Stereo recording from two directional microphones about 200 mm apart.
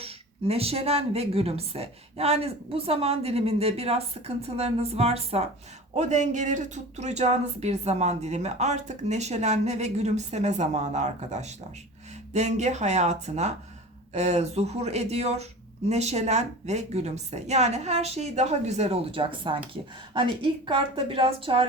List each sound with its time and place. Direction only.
0.0 s a woman's voice: 30° right (ahead or behind)